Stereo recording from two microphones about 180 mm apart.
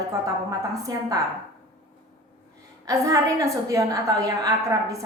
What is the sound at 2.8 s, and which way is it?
A woman's voice, 20° right (ahead or behind).